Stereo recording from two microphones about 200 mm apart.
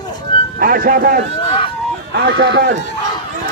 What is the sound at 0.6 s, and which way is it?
Speech, 45° right (ahead or behind).